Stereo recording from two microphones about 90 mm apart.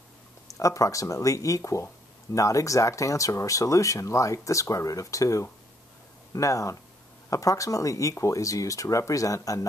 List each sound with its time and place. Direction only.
0.6 s speech: 35° left (ahead or behind)